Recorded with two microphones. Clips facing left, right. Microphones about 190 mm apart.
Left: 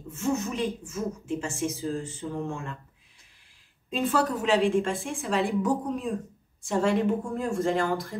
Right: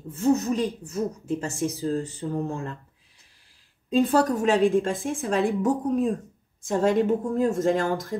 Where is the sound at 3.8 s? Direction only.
45° right (ahead or behind).